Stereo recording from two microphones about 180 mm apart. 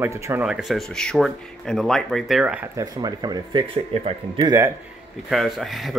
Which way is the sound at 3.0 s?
25° right (ahead or behind).